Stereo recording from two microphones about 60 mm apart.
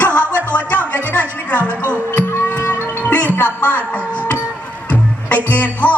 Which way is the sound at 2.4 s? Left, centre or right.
Left.